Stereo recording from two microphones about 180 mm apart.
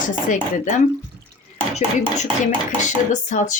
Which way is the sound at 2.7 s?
40° left (ahead or behind).